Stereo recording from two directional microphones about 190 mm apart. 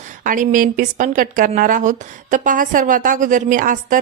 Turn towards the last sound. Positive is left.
turn(degrees=-45)  # may be behind; listen again after turning